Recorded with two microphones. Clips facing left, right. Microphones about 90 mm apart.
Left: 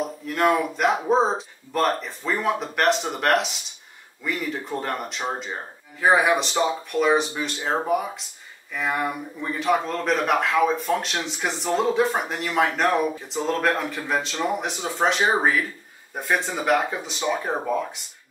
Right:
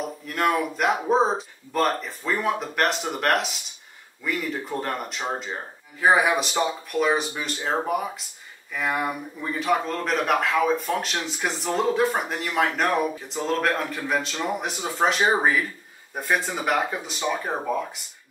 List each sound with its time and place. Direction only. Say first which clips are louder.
0.3 s speech: left 2 dB; centre (ahead or behind)